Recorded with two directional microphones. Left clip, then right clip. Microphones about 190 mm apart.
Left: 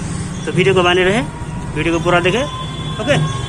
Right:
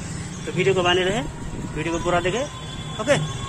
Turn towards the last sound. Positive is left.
turn(degrees=-20)  # may be behind; listen again after turning